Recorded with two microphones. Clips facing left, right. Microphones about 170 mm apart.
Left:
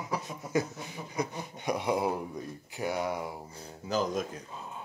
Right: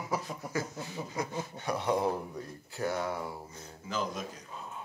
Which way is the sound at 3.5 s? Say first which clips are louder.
Left 5 dB; 35° left (ahead or behind).